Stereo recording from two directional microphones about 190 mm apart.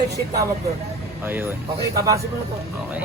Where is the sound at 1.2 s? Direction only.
10° right (ahead or behind).